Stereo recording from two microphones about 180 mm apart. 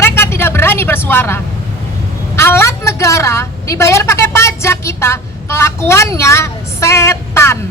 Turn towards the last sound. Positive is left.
turn(degrees=15)  # may be behind; listen again after turning